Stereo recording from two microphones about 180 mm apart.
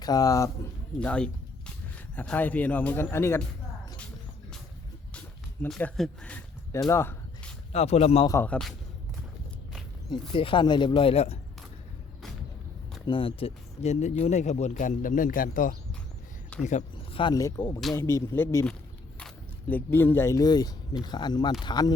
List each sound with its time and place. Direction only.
0.0 s speech: 20° left (ahead or behind)
0.9 s speech: 5° left (ahead or behind)
5.6 s speech: centre (ahead or behind)
6.7 s a sound: 15° left (ahead or behind)
7.7 s speech: 35° left (ahead or behind)
8.3 s speech: 10° left (ahead or behind)
10.1 s speech: 30° left (ahead or behind)
13.1 s speech: 30° left (ahead or behind); by 15.7 s 50° left (ahead or behind)
16.6 s a sound: 40° left (ahead or behind)
17.2 s speech: 20° left (ahead or behind)